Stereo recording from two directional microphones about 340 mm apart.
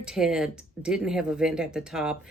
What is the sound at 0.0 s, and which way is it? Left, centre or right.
Speech, centre.